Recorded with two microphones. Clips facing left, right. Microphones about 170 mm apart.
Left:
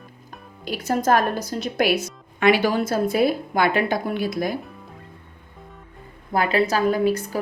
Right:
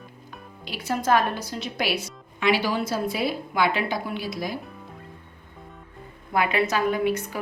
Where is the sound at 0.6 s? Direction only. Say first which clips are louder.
Left 5 dB; 45° left (ahead or behind).